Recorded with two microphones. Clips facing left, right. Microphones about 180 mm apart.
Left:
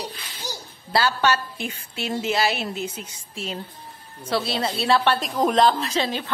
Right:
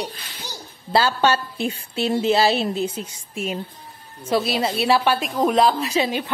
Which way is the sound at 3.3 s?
10° right (ahead or behind).